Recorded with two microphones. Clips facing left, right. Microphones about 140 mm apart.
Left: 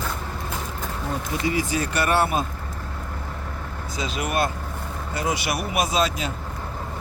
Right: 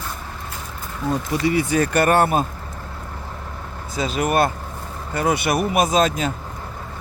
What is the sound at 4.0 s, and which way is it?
Speech, 45° right (ahead or behind).